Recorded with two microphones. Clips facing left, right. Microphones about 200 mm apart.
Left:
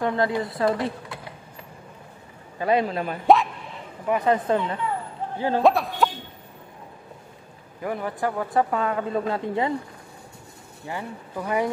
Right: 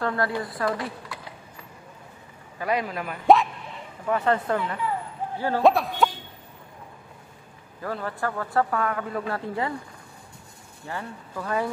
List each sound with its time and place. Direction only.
0.0 s a man's voice: 20° left (ahead or behind)
2.6 s a man's voice: 30° left (ahead or behind)
3.3 s bow-wow: centre (ahead or behind)
4.0 s speech: 15° left (ahead or behind)
5.6 s a sound: centre (ahead or behind)
7.8 s a man's voice: 15° left (ahead or behind)
10.9 s speech: 15° left (ahead or behind)